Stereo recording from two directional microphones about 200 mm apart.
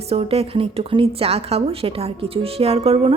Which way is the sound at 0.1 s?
30° right (ahead or behind).